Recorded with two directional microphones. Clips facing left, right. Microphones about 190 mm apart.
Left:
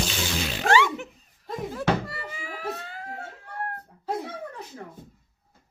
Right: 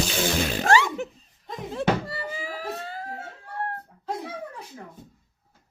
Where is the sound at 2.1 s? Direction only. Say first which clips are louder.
Right 4 dB; 35° right (ahead or behind).